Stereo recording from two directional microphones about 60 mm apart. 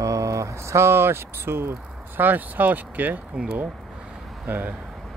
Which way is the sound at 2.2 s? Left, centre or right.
Right.